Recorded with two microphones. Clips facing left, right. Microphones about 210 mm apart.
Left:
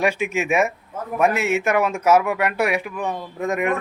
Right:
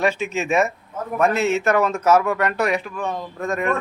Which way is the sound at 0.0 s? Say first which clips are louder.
Even; 10° left (ahead or behind).